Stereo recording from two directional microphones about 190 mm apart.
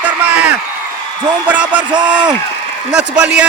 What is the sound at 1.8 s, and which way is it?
Speech, 25° right (ahead or behind).